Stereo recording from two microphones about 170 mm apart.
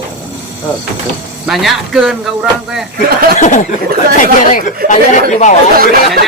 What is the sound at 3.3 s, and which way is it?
Speech, 45° left (ahead or behind).